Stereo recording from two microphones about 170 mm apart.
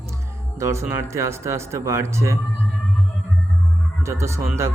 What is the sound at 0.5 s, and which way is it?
A man's voice, 15° right (ahead or behind).